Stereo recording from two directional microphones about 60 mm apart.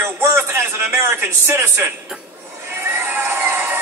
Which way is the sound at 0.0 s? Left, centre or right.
Right.